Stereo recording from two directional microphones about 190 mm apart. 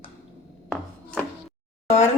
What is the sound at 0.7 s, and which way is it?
Chopping, 5° left (ahead or behind).